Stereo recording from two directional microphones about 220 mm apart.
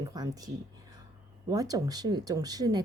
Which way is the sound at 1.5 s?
15° right (ahead or behind).